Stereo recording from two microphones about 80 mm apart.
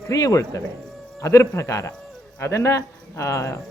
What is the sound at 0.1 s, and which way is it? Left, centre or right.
Speech, left.